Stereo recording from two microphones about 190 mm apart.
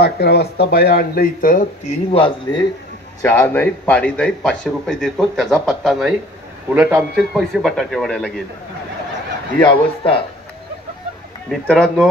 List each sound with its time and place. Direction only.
0.0 s speech: 60° left (ahead or behind)
2.5 s a man's voice: 15° left (ahead or behind)
9.7 s speech: 25° left (ahead or behind)
11.6 s a man's voice: 5° left (ahead or behind)